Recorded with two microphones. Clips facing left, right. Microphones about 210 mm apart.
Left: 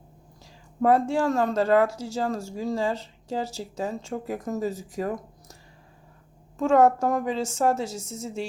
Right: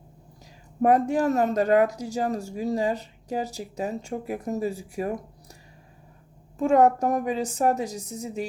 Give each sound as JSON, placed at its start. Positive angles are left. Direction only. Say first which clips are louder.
{"t": 0.8, "sound": "speech", "louder": "right 1 dB", "side_deg": -15}
{"t": 6.6, "sound": "speech", "louder": "even", "side_deg": -15}